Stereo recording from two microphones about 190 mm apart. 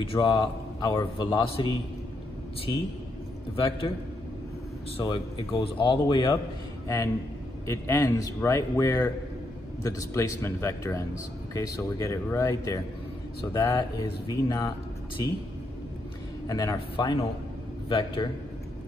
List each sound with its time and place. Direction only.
0.0 s a man's voice: 25° left (ahead or behind)
3.5 s a man's voice: 30° left (ahead or behind)
4.9 s a man's voice: 25° left (ahead or behind)
7.6 s a man's voice: 15° left (ahead or behind)
16.4 s a man's voice: 20° left (ahead or behind)